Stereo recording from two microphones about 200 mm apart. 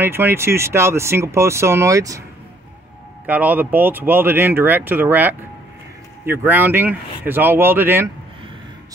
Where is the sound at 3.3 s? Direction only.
10° right (ahead or behind).